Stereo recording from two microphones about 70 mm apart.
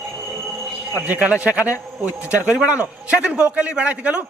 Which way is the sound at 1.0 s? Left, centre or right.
Right.